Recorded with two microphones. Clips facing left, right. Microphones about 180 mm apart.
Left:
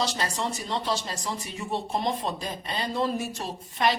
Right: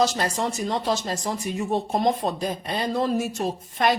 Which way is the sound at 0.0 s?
45° right (ahead or behind).